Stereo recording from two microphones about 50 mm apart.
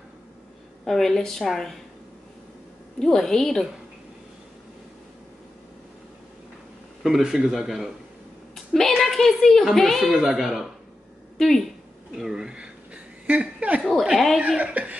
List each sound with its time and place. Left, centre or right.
0.8 s a woman's voice: centre
3.0 s a woman's voice: centre
7.0 s speech: centre
8.9 s a woman's voice: centre
11.3 s speech: centre
12.2 s a sound: centre
14.1 s a woman's voice: centre
14.6 s speech: right